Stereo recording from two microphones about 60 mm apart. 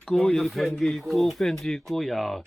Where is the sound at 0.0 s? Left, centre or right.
Centre.